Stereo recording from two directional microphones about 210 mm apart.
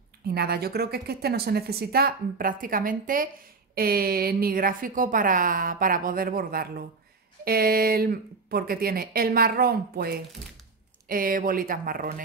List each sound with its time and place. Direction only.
0.3 s a woman's voice: 50° right (ahead or behind)